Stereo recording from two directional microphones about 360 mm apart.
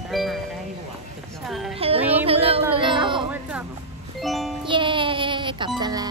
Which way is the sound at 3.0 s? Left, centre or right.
Centre.